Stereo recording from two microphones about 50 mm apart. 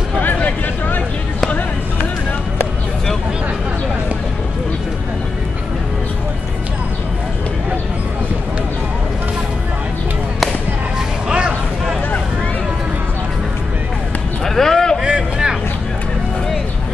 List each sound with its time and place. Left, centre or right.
0.2 s vehicle: left
11.2 s vehicle: right
14.4 s a sound: centre
15.0 s vehicle: centre